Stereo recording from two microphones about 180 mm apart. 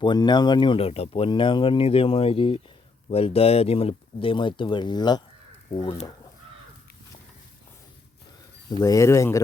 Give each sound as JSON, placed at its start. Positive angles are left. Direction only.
{"t": 0.0, "sound": "speech", "side_deg": 25}
{"t": 8.8, "sound": "speech", "side_deg": 15}